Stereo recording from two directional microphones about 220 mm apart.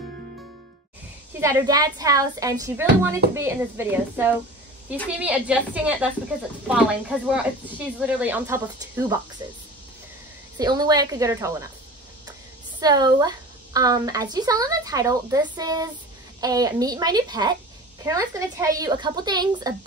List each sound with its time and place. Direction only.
1.4 s a woman's voice: 15° right (ahead or behind)
10.6 s a woman's voice: 20° right (ahead or behind)
12.8 s a woman's voice: 20° right (ahead or behind)